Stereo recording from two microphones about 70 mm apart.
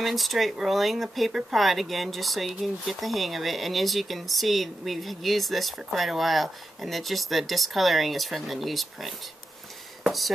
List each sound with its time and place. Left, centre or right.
0.0 s speech: centre